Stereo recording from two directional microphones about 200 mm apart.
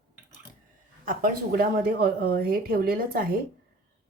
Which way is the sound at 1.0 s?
45° right (ahead or behind).